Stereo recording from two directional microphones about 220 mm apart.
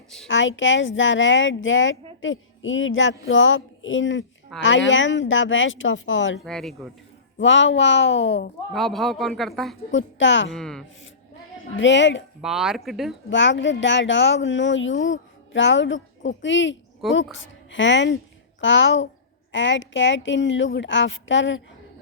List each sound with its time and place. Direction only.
0.3 s a woman's voice: 60° left (ahead or behind)
4.5 s a man's voice: centre (ahead or behind)
4.9 s a woman's voice: 60° left (ahead or behind)
6.4 s a man's voice: centre (ahead or behind)
7.3 s a woman's voice: 60° left (ahead or behind)
8.7 s a man's voice: centre (ahead or behind)
9.9 s a woman's voice: 55° left (ahead or behind)
10.5 s a man's voice: 5° left (ahead or behind)
11.8 s a woman's voice: 55° left (ahead or behind)
12.4 s a man's voice: centre (ahead or behind)
13.3 s a woman's voice: 55° left (ahead or behind)